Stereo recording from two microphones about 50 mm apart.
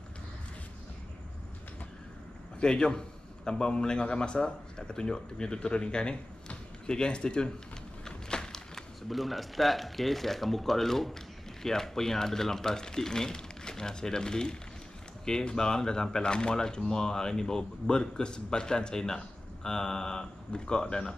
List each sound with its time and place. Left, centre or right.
2.6 s speech: centre
8.0 s a sound: centre
9.1 s speech: centre